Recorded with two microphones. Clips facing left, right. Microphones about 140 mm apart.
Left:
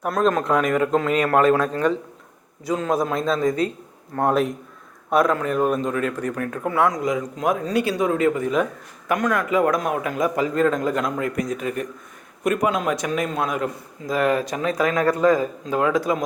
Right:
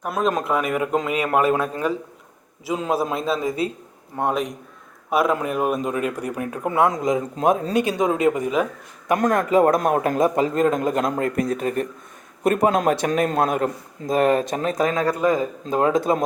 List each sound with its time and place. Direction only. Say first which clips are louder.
0.0 s a man's voice: left 2 dB; 5° right (ahead or behind)
5.3 s a man's voice: left 1 dB; 10° right (ahead or behind)
9.1 s a man's voice: right 3 dB; 40° right (ahead or behind)
10.2 s a man's voice: right 2 dB; 30° right (ahead or behind); by 13.5 s 45° right (ahead or behind)
14.1 s a man's voice: right 2 dB; 25° right (ahead or behind)
14.9 s a man's voice: left 2 dB; 15° right (ahead or behind)